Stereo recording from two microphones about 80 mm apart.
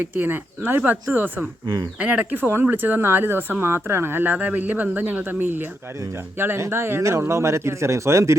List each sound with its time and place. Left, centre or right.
0.0 s speech: right